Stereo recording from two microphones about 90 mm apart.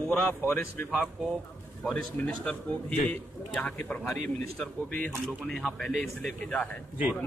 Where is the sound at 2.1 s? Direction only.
15° left (ahead or behind).